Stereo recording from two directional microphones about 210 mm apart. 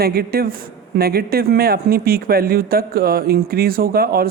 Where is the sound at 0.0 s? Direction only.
45° right (ahead or behind).